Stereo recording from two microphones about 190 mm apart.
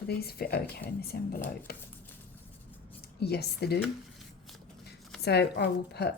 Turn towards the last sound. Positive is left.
turn(degrees=60)  # may be behind; listen again after turning